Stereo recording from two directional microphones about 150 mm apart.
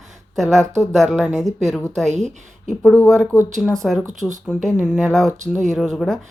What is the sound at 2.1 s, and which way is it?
Speech, 50° right (ahead or behind).